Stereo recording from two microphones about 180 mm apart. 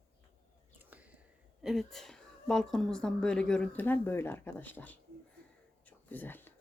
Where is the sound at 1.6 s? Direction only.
Centre (ahead or behind).